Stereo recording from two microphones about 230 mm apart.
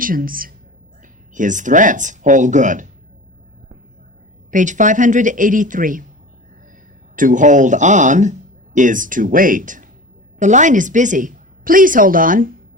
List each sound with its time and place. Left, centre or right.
0.0 s speech: right
4.5 s speech: right
7.2 s speech: right